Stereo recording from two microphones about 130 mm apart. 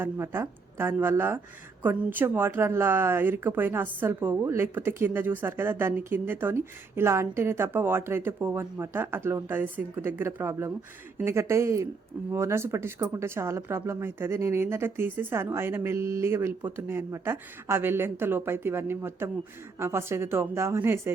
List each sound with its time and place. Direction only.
0.0 s speech: 20° right (ahead or behind)